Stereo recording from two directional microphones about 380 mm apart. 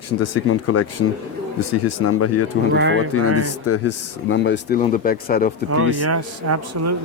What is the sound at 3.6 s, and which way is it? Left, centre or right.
Speech, left.